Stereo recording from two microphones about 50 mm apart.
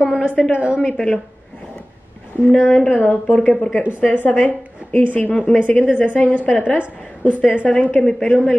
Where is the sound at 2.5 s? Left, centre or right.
Left.